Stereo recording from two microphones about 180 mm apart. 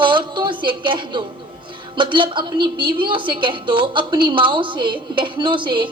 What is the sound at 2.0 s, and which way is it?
A woman's voice, 25° right (ahead or behind).